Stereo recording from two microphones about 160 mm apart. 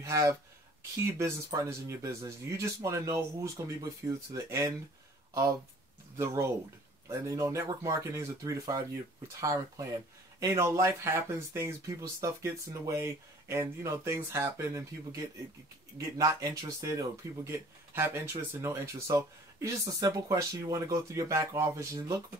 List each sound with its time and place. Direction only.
0.0 s speech: 20° right (ahead or behind)